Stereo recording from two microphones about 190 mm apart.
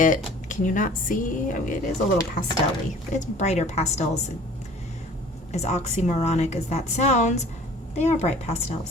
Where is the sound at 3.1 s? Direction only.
35° left (ahead or behind).